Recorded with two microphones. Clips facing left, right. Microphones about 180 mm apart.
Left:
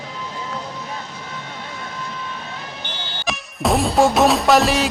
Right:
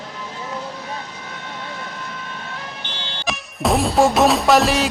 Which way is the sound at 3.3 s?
Centre (ahead or behind).